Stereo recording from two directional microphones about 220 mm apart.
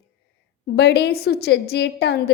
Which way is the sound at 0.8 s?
50° left (ahead or behind).